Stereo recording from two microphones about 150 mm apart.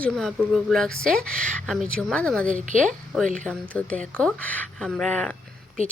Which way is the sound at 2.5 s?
60° right (ahead or behind).